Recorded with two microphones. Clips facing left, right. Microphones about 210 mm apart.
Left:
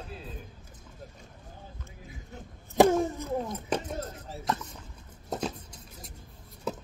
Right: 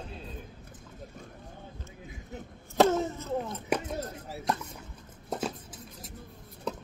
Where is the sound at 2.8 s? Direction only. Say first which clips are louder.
Left 2 dB; 15° left (ahead or behind).